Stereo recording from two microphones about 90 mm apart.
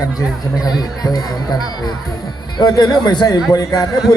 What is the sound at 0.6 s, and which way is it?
Speech, 45° left (ahead or behind).